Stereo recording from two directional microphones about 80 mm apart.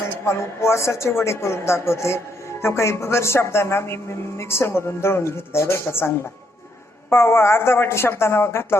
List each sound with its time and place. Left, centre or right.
0.3 s speech: left